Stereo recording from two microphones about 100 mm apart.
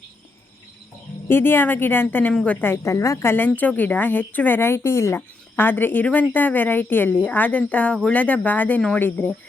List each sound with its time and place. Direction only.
1.3 s speech: 20° left (ahead or behind)